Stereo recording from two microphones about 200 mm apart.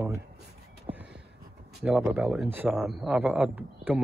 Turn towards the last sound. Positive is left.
turn(degrees=-10)  # may be behind; listen again after turning